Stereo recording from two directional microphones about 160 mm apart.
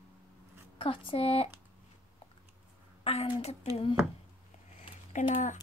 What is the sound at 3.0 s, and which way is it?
Speech, 40° left (ahead or behind).